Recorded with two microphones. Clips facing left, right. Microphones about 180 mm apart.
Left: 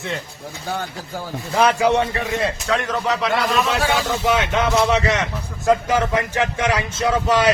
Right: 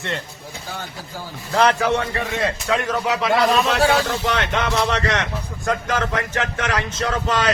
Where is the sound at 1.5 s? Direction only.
10° left (ahead or behind).